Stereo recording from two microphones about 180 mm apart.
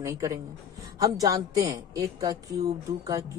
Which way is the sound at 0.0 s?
15° right (ahead or behind).